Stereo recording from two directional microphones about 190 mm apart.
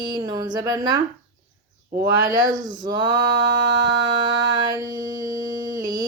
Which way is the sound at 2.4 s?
45° right (ahead or behind).